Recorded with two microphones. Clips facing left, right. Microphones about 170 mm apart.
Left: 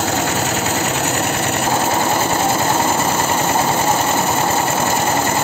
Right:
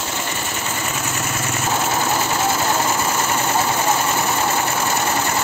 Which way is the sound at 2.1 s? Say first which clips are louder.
Left 3 dB; 30° left (ahead or behind).